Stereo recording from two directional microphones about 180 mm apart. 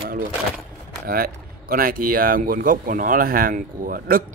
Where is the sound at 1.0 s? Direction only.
55° right (ahead or behind).